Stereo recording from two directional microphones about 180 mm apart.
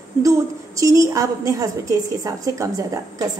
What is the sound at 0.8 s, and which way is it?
A woman's voice, 15° right (ahead or behind).